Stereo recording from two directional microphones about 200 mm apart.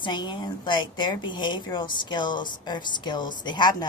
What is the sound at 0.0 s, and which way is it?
Speech, 20° left (ahead or behind).